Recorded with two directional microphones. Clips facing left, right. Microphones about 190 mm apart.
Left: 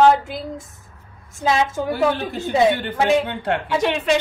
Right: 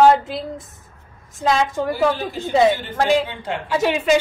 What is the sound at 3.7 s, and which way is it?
Speech, 5° right (ahead or behind).